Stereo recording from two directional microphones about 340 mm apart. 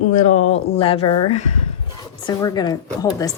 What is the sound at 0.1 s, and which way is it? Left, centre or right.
Speech, left.